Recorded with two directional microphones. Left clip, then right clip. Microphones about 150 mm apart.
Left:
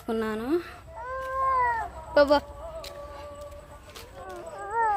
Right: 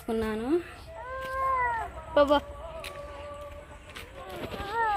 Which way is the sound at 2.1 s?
5° left (ahead or behind).